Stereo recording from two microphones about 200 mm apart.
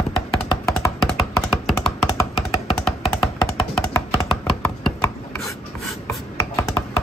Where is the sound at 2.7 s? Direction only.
Centre (ahead or behind).